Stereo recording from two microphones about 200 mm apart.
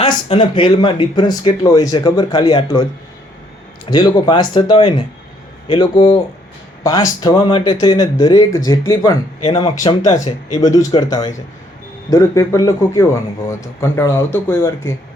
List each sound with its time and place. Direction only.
0.0 s speech: 25° left (ahead or behind)
3.8 s speech: 20° left (ahead or behind)